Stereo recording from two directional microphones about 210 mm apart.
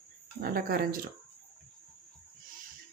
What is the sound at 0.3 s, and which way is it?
Speech, 45° right (ahead or behind).